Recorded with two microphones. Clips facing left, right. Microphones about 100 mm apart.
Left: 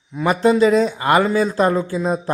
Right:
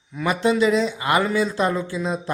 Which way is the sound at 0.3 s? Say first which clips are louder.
Left 4 dB; 35° left (ahead or behind).